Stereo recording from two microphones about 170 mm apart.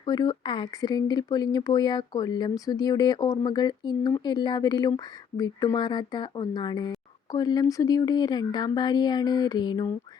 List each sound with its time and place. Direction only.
0.0 s speech: 25° left (ahead or behind)